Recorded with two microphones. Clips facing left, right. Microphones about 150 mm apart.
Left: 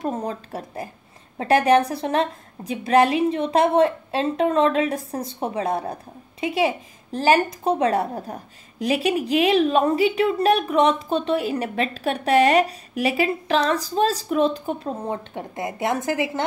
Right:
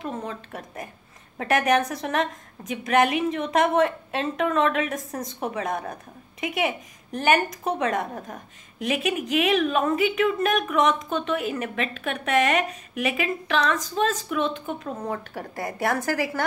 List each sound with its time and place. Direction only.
0.0 s a woman's voice: 40° left (ahead or behind)
15.0 s a woman's voice: 20° left (ahead or behind)